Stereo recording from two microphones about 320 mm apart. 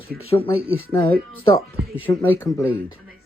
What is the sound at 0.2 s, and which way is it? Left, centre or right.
Speech, centre.